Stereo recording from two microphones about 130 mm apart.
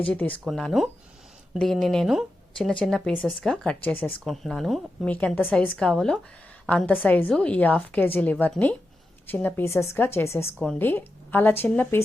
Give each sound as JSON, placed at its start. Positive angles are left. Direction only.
{"t": 0.0, "sound": "a woman's voice", "side_deg": 10}
{"t": 0.4, "sound": "a woman's voice", "side_deg": 0}
{"t": 4.2, "sound": "a woman's voice", "side_deg": 0}
{"t": 5.1, "sound": "a woman's voice", "side_deg": 10}